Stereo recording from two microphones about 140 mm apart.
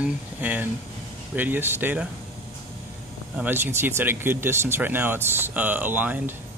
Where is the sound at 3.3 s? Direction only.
15° right (ahead or behind).